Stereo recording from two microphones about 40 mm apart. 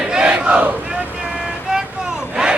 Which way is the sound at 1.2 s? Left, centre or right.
Centre.